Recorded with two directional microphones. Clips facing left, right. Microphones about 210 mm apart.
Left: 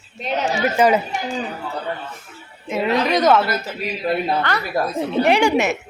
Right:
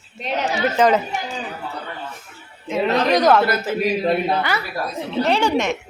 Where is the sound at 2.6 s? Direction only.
10° left (ahead or behind).